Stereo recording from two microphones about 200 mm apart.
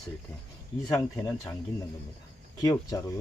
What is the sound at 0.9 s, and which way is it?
Speech, 15° left (ahead or behind).